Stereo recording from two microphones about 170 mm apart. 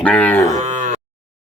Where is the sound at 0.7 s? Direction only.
50° right (ahead or behind).